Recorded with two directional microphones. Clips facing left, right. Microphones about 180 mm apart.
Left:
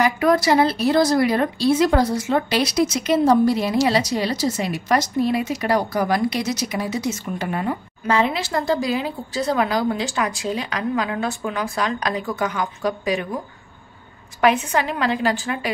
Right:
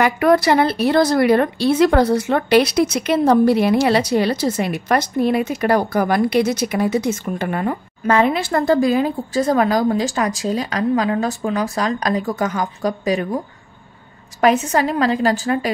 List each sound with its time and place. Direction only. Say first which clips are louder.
0.0 s speech: right 3 dB; 60° right (ahead or behind); by 13.4 s 40° right (ahead or behind)
14.4 s a woman's voice: right 3 dB; 40° right (ahead or behind)